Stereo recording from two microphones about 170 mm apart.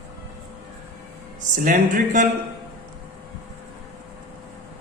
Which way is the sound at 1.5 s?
50° right (ahead or behind).